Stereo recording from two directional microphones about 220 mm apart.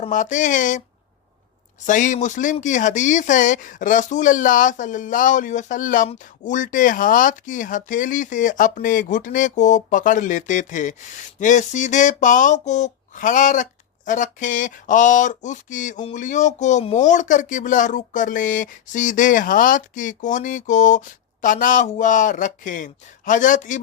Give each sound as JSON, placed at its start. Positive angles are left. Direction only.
{"t": 0.0, "sound": "speech", "side_deg": 35}
{"t": 1.9, "sound": "speech", "side_deg": 35}